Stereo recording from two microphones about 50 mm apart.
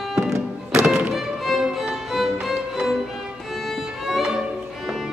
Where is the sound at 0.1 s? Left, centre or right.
Centre.